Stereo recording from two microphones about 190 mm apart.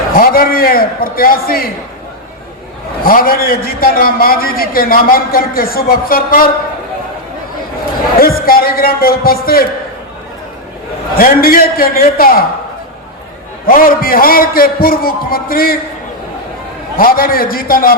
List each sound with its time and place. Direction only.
0.2 s a man's voice: 50° left (ahead or behind)
3.0 s a man's voice: 50° left (ahead or behind)
8.2 s a man's voice: 50° left (ahead or behind)
11.2 s a man's voice: 50° left (ahead or behind)
13.7 s a man's voice: 50° left (ahead or behind)
17.0 s a man's voice: 50° left (ahead or behind)